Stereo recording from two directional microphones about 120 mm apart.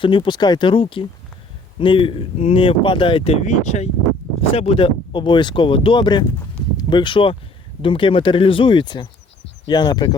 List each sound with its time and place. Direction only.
0.0 s speech: 40° left (ahead or behind)
3.4 s speech: 70° left (ahead or behind)
4.5 s speech: 50° left (ahead or behind)